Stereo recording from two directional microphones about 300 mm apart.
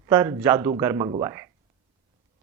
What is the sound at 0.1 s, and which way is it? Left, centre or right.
Speech, centre.